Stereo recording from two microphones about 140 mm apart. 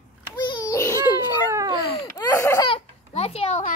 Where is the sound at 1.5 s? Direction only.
25° right (ahead or behind).